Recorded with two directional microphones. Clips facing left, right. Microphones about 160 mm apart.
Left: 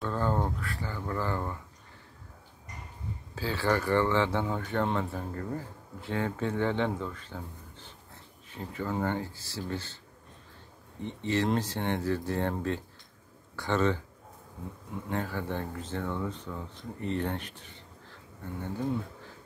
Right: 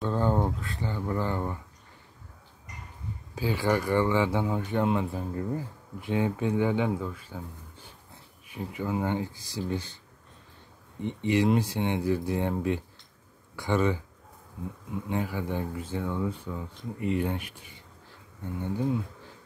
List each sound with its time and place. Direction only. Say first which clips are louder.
0.0 s a sound: right 3 dB; 20° right (ahead or behind)
3.3 s speech: right 2 dB; 15° right (ahead or behind)
11.0 s speech: right 4 dB; 15° right (ahead or behind)
15.0 s speech: right 2 dB; 10° right (ahead or behind)